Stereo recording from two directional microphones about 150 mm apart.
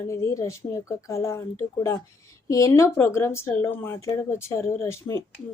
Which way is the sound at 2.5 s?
20° left (ahead or behind).